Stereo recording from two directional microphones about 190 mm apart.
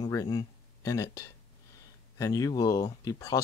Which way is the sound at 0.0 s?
20° left (ahead or behind).